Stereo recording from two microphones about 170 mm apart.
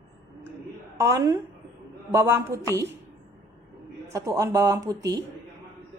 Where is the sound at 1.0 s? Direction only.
20° right (ahead or behind).